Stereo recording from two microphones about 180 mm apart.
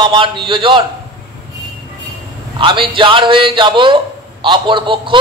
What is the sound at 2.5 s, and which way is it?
Speech, 30° right (ahead or behind).